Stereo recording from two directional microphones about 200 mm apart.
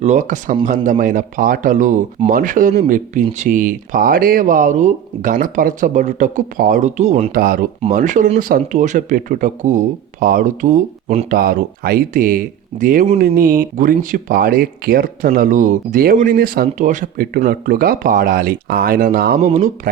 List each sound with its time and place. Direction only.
0.0 s speech: 35° right (ahead or behind)
7.3 s speech: 45° right (ahead or behind)
11.3 s speech: 50° right (ahead or behind)
19.4 s speech: 35° right (ahead or behind)